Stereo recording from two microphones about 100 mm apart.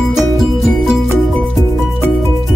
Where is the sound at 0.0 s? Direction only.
Centre (ahead or behind).